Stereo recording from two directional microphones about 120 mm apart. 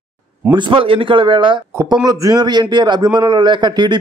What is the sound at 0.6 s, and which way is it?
A man's voice, 45° right (ahead or behind).